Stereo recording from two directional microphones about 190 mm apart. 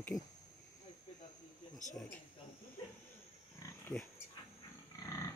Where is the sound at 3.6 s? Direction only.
10° left (ahead or behind).